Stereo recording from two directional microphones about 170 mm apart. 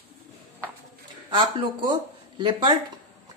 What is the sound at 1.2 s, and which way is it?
Speech, 30° right (ahead or behind).